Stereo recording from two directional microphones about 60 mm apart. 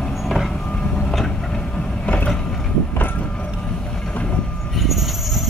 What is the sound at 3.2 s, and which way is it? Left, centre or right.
Train, centre.